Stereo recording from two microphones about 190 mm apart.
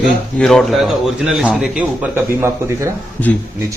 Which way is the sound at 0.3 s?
5° left (ahead or behind).